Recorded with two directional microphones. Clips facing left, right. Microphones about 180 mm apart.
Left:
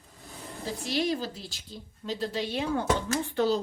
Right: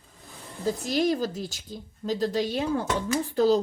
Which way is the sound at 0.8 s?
45° right (ahead or behind).